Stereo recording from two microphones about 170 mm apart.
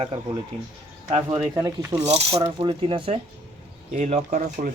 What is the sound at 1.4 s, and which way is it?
Speech, 20° right (ahead or behind).